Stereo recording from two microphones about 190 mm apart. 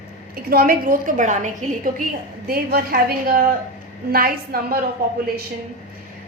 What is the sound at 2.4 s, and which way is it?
A woman's voice, 50° right (ahead or behind).